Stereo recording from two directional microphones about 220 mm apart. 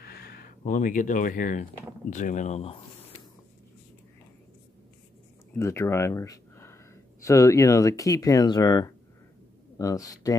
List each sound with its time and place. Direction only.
0.0 s speech: 45° left (ahead or behind); by 2.8 s 30° left (ahead or behind)
5.6 s speech: 10° left (ahead or behind)